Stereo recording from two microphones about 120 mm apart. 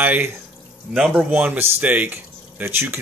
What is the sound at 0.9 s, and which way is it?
Speech, 10° right (ahead or behind).